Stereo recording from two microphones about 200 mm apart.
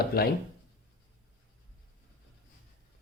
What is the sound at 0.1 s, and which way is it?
Speech, 50° left (ahead or behind).